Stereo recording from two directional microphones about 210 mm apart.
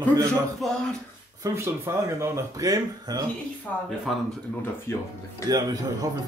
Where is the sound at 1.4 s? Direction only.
10° right (ahead or behind).